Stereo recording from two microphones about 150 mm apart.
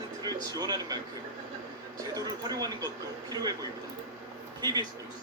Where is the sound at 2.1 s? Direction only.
25° right (ahead or behind).